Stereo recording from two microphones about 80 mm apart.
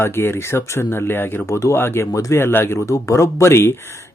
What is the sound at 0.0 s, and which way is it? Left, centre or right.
Speech, left.